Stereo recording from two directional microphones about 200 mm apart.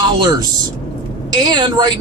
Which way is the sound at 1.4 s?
20° right (ahead or behind).